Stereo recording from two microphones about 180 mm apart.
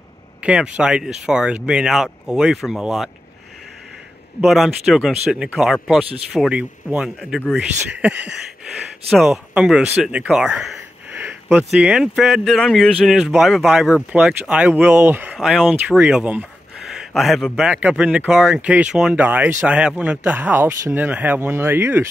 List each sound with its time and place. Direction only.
0.4 s speech: 5° right (ahead or behind)
4.4 s speech: centre (ahead or behind)
9.1 s speech: centre (ahead or behind)